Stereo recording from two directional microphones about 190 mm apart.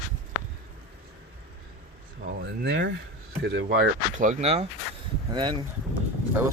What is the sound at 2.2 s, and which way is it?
Speech, 55° right (ahead or behind).